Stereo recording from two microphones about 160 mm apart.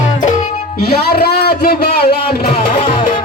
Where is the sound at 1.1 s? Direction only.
75° left (ahead or behind).